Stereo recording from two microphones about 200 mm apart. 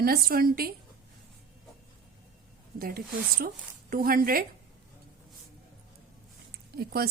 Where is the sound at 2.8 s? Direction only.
50° right (ahead or behind).